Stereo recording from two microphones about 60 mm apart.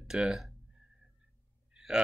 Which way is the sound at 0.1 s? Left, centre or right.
Centre.